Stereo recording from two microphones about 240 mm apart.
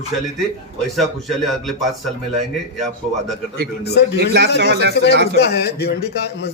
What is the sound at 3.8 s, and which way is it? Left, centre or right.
Speech, left.